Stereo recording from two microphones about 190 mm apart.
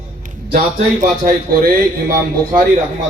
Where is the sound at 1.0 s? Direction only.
50° right (ahead or behind).